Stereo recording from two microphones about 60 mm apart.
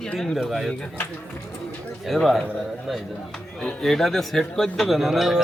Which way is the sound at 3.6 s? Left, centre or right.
Centre.